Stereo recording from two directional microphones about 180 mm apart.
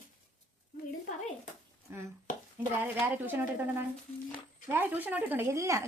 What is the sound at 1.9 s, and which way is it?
A woman's voice, 15° right (ahead or behind).